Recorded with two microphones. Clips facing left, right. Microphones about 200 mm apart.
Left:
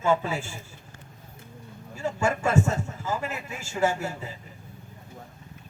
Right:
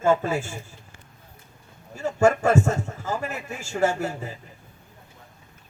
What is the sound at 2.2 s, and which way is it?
A man's voice, 50° right (ahead or behind).